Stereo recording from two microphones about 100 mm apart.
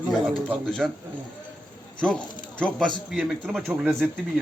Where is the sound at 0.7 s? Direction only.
5° left (ahead or behind).